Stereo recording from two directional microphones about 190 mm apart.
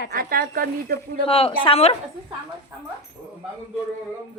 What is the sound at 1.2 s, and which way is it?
Speech, 30° left (ahead or behind).